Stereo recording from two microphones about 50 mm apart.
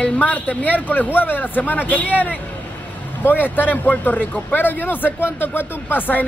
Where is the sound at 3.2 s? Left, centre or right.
Left.